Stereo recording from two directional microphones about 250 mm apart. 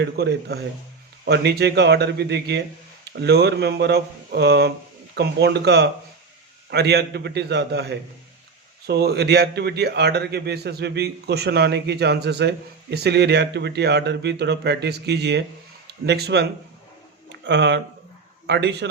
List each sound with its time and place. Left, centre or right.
0.0 s a man's voice: right